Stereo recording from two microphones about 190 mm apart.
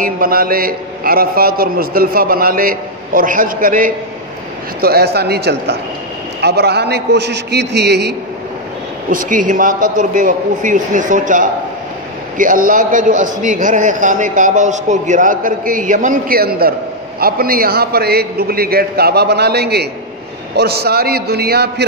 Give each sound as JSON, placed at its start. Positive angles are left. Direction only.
{"t": 0.0, "sound": "a man's voice", "side_deg": -50}
{"t": 4.8, "sound": "a man's voice", "side_deg": -55}
{"t": 9.1, "sound": "a man's voice", "side_deg": -45}